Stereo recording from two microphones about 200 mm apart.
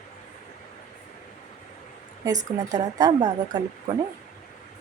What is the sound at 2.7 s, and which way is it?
Speech, 20° right (ahead or behind).